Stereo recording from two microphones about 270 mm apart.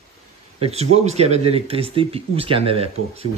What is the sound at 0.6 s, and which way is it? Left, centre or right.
Speech, right.